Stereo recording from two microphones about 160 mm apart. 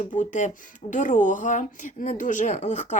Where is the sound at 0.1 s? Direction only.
50° left (ahead or behind).